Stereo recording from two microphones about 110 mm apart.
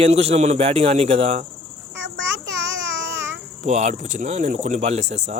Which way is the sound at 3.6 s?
90° right.